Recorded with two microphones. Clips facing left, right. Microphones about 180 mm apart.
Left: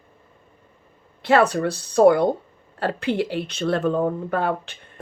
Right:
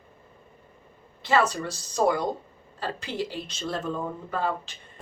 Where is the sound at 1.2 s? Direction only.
65° left (ahead or behind).